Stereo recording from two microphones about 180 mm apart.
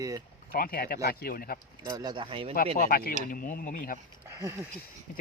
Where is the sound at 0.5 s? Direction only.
55° left (ahead or behind).